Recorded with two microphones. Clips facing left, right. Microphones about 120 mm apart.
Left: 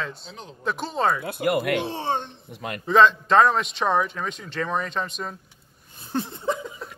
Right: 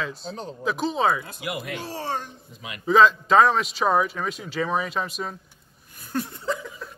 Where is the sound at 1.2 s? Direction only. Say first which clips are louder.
Left 9 dB; 55° left (ahead or behind).